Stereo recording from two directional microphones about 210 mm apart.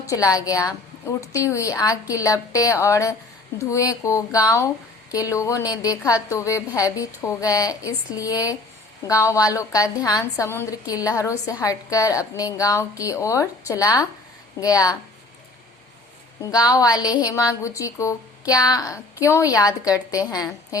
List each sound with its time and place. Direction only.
0.0 s a woman's voice: 15° left (ahead or behind)
16.5 s a woman's voice: 20° left (ahead or behind)